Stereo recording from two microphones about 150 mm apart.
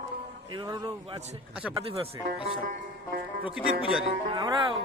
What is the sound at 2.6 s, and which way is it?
Music, 70° right (ahead or behind).